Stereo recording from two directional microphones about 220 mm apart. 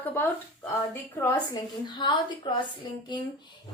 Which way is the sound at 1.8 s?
20° left (ahead or behind).